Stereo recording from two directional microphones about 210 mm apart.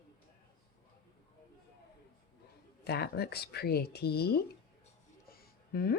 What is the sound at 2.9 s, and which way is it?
Speech, 50° left (ahead or behind).